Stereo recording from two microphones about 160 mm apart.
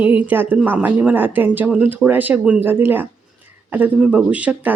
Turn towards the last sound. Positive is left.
turn(degrees=-10)  # may be behind; listen again after turning